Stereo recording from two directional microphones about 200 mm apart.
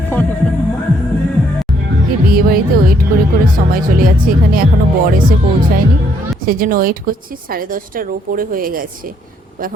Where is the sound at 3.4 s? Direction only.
45° right (ahead or behind).